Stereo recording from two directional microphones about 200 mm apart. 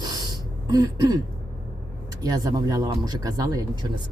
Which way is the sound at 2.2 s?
20° right (ahead or behind).